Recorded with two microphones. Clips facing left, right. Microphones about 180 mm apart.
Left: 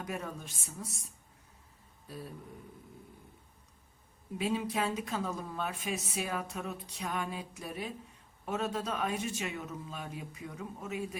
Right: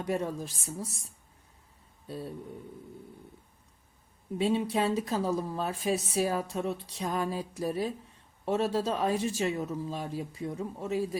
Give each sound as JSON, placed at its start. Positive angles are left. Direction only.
{"t": 0.0, "sound": "speech", "side_deg": -30}
{"t": 2.0, "sound": "a sound", "side_deg": -30}
{"t": 4.4, "sound": "speech", "side_deg": -30}